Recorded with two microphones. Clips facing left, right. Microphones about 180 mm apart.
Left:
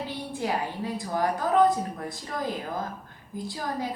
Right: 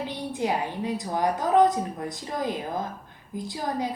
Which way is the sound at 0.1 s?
20° right (ahead or behind).